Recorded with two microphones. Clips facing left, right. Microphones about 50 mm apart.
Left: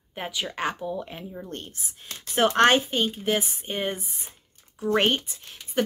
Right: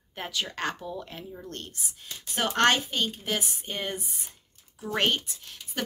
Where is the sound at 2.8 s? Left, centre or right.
Centre.